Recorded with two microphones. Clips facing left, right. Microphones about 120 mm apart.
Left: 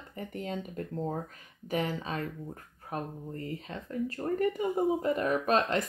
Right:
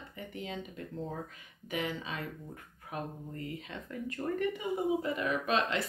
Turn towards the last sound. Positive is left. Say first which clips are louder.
# left 4 dB
turn(degrees=45)  # may be behind; listen again after turning